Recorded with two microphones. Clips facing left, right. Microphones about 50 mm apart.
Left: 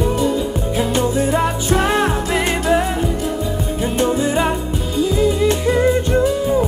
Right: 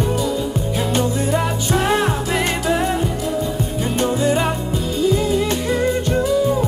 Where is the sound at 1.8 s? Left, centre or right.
Left.